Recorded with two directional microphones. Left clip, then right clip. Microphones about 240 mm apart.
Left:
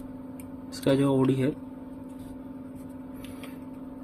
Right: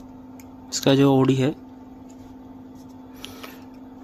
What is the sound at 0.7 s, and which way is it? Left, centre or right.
Speech, right.